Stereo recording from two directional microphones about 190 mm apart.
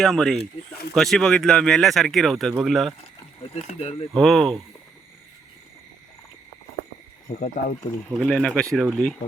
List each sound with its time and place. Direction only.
0.0 s speech: 5° left (ahead or behind)
3.4 s speech: 35° left (ahead or behind)
4.1 s speech: centre (ahead or behind)
7.3 s speech: 45° left (ahead or behind)
8.2 s speech: 5° left (ahead or behind)